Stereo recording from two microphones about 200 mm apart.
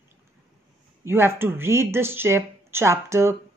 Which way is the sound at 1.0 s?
10° right (ahead or behind).